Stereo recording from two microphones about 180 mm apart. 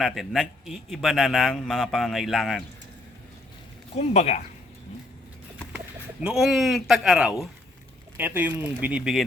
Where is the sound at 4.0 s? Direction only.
35° left (ahead or behind).